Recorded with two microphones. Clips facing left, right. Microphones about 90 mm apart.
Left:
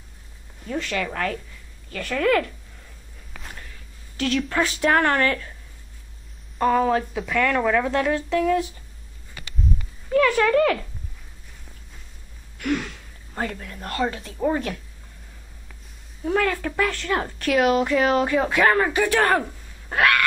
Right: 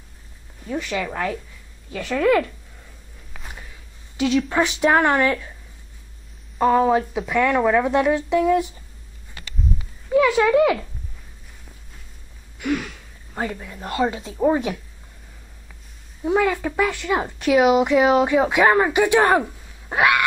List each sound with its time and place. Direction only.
0.7 s speech: 10° right (ahead or behind)
3.3 s a sound: 10° right (ahead or behind)
4.5 s speech: 15° right (ahead or behind)
6.6 s speech: 10° right (ahead or behind)
9.8 s speech: 10° right (ahead or behind)
12.5 s speech: 5° right (ahead or behind)
16.3 s speech: 15° right (ahead or behind)